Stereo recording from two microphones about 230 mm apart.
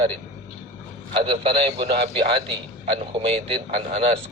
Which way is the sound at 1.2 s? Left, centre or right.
Right.